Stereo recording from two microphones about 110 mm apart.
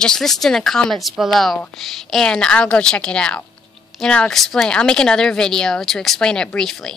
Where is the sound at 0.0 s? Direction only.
5° left (ahead or behind).